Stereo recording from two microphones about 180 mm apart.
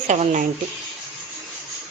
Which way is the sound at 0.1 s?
40° right (ahead or behind).